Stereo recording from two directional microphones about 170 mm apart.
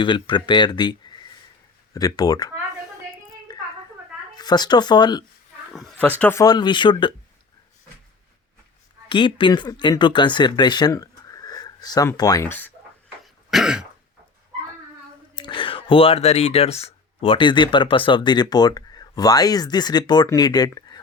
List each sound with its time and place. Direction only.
0.0 s speech: 25° left (ahead or behind)
3.5 s a sound: 25° left (ahead or behind)
4.4 s speech: 25° left (ahead or behind)
5.7 s speech: 5° left (ahead or behind)
6.4 s speech: 25° left (ahead or behind)
9.0 s speech: 30° left (ahead or behind); by 12.7 s 10° left (ahead or behind)
13.2 s throat clearing: centre (ahead or behind)
15.4 s speech: 30° left (ahead or behind)